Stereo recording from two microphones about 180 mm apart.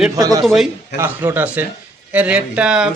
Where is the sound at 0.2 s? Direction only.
20° right (ahead or behind).